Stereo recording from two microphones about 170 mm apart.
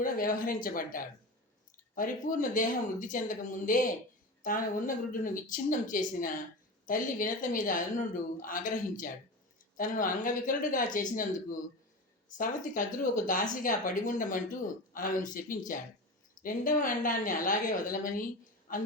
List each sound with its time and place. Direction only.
0.0 s speech: 55° left (ahead or behind)
12.4 s a woman's voice: 50° left (ahead or behind)